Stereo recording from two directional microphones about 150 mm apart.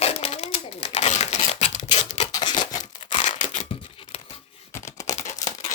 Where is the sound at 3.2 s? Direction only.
55° left (ahead or behind).